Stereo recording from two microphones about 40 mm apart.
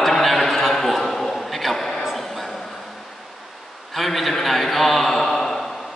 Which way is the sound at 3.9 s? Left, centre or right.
Centre.